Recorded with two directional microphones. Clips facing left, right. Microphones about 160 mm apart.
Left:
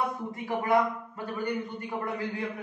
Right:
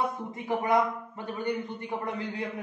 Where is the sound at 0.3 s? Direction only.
20° right (ahead or behind).